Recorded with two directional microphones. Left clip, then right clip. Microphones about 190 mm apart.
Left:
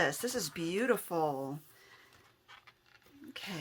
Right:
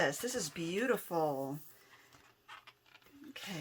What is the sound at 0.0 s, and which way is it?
Speech, 25° left (ahead or behind).